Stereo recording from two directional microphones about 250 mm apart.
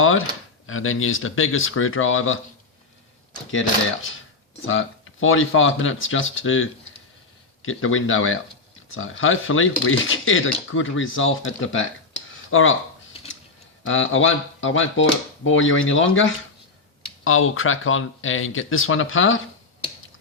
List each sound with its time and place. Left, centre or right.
0.0 s speech: left
4.6 s speech: left
13.2 s a sound: left
13.8 s speech: left